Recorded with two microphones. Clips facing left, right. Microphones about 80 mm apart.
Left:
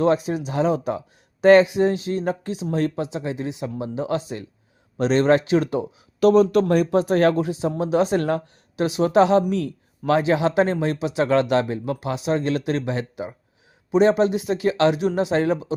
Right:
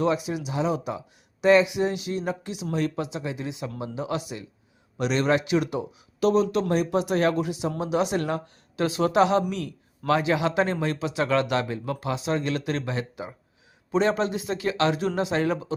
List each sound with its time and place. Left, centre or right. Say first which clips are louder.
0.0 s speech: left 5 dB; left
1.6 s speech: left 5 dB; left
6.1 s speech: left 6 dB; left
7.3 s speech: left 4 dB; left
9.0 s speech: left 4 dB; left